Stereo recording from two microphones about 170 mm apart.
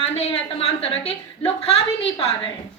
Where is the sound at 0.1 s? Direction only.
35° left (ahead or behind).